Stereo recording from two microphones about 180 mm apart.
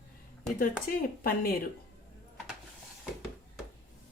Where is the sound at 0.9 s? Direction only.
50° left (ahead or behind).